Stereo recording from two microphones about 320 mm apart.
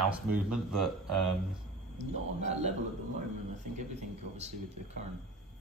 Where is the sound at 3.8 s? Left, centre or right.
Right.